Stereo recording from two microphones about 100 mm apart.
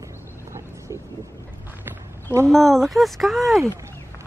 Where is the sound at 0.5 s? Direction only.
30° right (ahead or behind).